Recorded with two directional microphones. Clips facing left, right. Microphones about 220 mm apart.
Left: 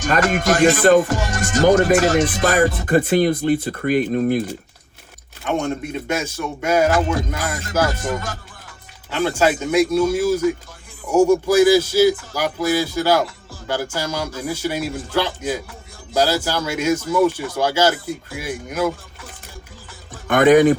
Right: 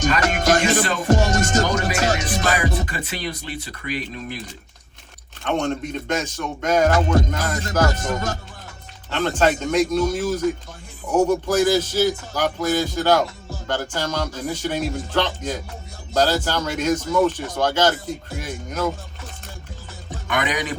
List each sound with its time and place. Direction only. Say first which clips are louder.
0.6 s speech: left 7 dB; 50° left (ahead or behind)
1.0 s music: right 4 dB; 45° right (ahead or behind)
1.6 s speech: left 8 dB; 50° left (ahead or behind)
5.4 s speech: left 1 dB; 5° left (ahead or behind)
7.9 s music: even; 45° right (ahead or behind)
9.0 s speech: left 1 dB; 10° left (ahead or behind)
20.2 s speech: left 13 dB; 50° left (ahead or behind)